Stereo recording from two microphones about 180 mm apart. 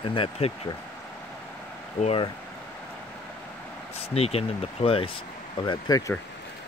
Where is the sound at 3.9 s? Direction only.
35° left (ahead or behind); by 6.2 s 20° left (ahead or behind).